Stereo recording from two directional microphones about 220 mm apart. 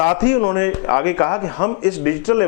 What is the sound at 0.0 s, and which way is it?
Speech, 15° left (ahead or behind).